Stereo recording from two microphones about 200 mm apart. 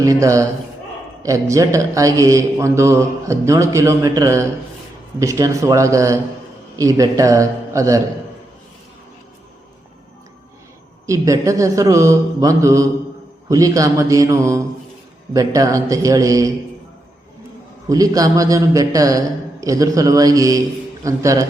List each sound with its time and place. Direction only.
0.0 s a man's voice: 15° right (ahead or behind)
11.0 s a man's voice: 15° right (ahead or behind)
17.8 s a man's voice: 15° right (ahead or behind)